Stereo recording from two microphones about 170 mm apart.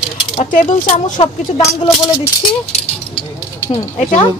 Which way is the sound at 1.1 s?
20° left (ahead or behind).